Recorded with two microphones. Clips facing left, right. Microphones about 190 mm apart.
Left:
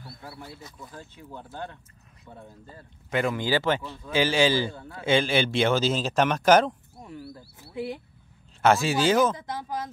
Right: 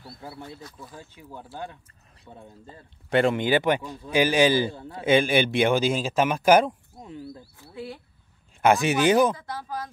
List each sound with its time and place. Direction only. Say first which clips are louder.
0.0 s speech: right 2 dB; 25° right (ahead or behind)
0.9 s speech: left 2 dB; 10° right (ahead or behind)
2.6 s speech: even; 30° right (ahead or behind); by 7.1 s 10° right (ahead or behind)
7.5 s speech: left 7 dB; 15° left (ahead or behind)
8.6 s speech: right 2 dB; 15° right (ahead or behind)
9.4 s speech: left 1 dB; 20° left (ahead or behind)